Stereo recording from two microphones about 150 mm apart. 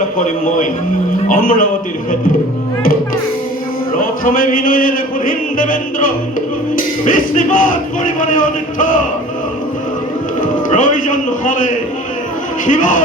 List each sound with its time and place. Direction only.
1.3 s a man's voice: 70° left (ahead or behind)
3.9 s music: 65° left (ahead or behind)
6.7 s speech: 65° left (ahead or behind)
10.7 s speech: 60° left (ahead or behind)